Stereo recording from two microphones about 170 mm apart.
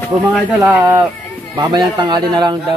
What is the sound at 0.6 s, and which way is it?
Speech, 10° right (ahead or behind).